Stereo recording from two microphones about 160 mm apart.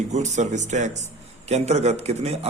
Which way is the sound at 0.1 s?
45° right (ahead or behind).